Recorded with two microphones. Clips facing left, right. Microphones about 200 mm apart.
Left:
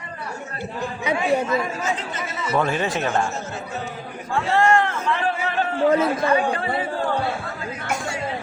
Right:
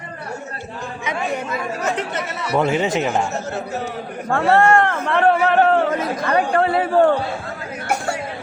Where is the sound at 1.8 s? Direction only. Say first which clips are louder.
Right 4 dB; 70° right (ahead or behind).